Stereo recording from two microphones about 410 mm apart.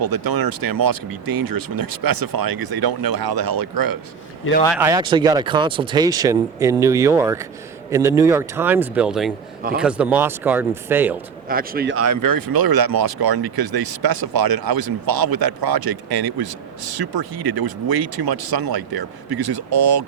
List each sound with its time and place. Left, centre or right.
0.0 s speech: right
4.6 s a man's voice: centre
11.4 s speech: right
11.9 s speech: right